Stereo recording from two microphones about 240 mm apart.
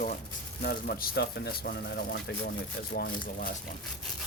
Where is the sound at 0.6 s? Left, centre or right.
Left.